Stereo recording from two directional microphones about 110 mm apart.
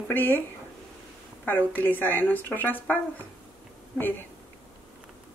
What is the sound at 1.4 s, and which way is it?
A woman's voice, 15° left (ahead or behind).